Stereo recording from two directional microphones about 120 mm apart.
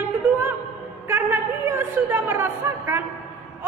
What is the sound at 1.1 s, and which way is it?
A woman's voice, 20° right (ahead or behind).